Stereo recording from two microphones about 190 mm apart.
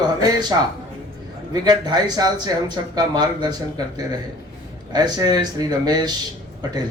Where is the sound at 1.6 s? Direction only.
20° right (ahead or behind).